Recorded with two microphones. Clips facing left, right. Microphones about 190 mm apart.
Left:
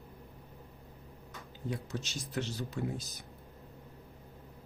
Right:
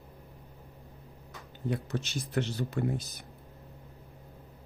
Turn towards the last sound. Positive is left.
turn(degrees=-60)  # may be behind; listen again after turning